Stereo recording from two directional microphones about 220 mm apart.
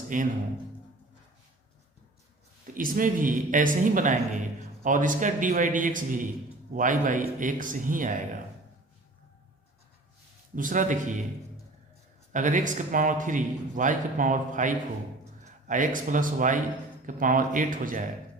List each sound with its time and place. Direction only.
0.1 s a man's voice: 35° right (ahead or behind)
2.7 s a man's voice: 40° right (ahead or behind)
10.5 s a man's voice: 35° right (ahead or behind)
12.3 s a man's voice: 35° right (ahead or behind)